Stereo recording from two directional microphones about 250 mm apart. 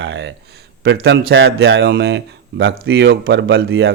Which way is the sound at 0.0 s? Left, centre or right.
Right.